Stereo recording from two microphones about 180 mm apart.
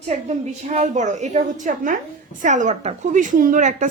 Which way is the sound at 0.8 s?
40° right (ahead or behind).